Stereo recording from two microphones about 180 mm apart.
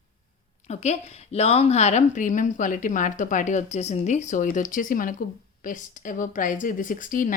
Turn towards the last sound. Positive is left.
turn(degrees=50)  # may be behind; listen again after turning